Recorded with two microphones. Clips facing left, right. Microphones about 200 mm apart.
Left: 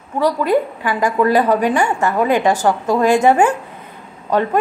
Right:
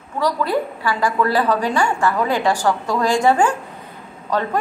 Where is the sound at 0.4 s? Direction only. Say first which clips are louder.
Left 4 dB; 15° left (ahead or behind).